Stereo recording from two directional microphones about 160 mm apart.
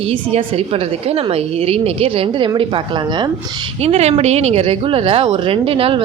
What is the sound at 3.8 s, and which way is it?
Speech, 40° right (ahead or behind).